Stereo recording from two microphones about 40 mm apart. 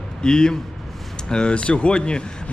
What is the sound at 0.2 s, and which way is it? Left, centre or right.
A man's voice, centre.